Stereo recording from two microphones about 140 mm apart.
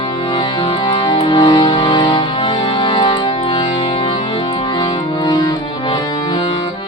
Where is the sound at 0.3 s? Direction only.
35° left (ahead or behind).